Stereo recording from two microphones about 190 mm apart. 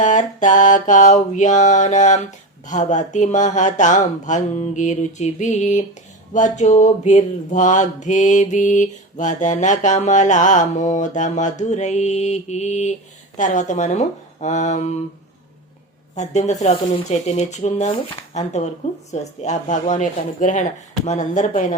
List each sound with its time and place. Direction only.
0.0 s mantra: 40° left (ahead or behind)
16.1 s mantra: 35° left (ahead or behind)